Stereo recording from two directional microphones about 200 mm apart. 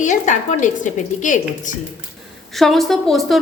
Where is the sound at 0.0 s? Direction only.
40° left (ahead or behind).